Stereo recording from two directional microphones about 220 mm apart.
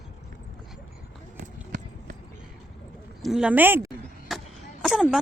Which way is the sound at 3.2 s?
Centre (ahead or behind).